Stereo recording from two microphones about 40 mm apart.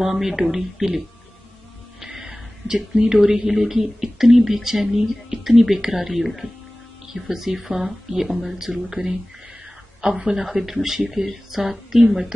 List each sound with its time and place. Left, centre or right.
0.0 s speech: centre
2.0 s a sound: centre
3.3 s speech: centre